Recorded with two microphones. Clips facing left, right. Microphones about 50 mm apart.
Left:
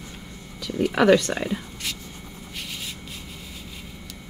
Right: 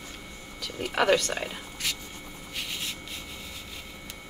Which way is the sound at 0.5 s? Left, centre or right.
Centre.